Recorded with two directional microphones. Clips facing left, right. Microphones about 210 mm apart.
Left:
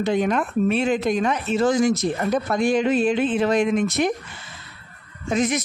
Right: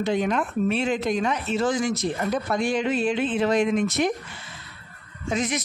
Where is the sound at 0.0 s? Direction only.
50° left (ahead or behind).